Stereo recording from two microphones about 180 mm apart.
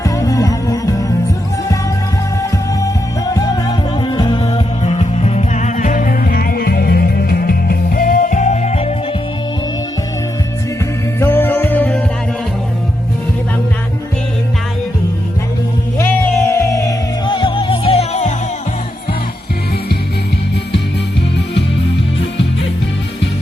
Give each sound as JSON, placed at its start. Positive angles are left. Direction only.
{"t": 0.0, "sound": "music", "side_deg": 20}
{"t": 2.4, "sound": "music", "side_deg": 20}
{"t": 11.2, "sound": "music", "side_deg": 10}
{"t": 16.0, "sound": "music", "side_deg": 10}